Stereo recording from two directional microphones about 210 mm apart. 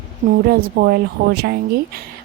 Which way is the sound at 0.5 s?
50° right (ahead or behind).